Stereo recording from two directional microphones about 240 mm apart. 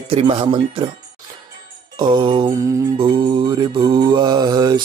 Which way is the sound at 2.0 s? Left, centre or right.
Centre.